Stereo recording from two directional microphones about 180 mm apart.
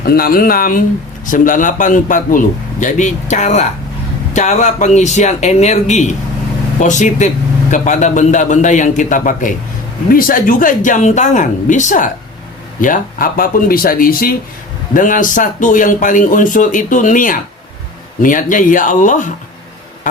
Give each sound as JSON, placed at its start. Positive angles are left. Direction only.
{"t": 0.0, "sound": "speech", "side_deg": 55}